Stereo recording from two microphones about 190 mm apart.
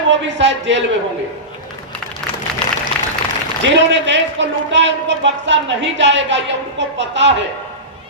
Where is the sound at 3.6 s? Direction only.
70° right (ahead or behind).